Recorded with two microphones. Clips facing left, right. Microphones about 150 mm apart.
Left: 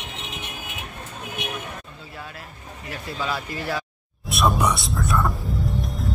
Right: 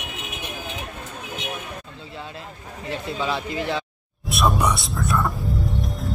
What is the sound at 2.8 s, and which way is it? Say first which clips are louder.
Speech: right 3 dB; 25° right (ahead or behind).